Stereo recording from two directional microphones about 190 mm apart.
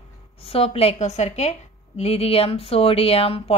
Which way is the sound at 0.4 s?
30° left (ahead or behind).